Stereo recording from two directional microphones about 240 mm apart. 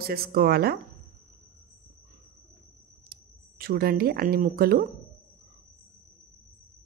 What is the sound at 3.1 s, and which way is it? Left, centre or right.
Speech, right.